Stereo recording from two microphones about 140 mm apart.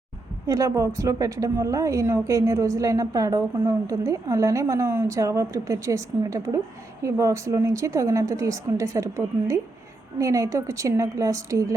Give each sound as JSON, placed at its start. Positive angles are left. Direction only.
{"t": 0.4, "sound": "a woman's voice", "side_deg": -25}